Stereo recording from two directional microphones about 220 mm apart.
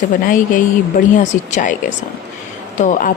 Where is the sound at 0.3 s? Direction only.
40° left (ahead or behind).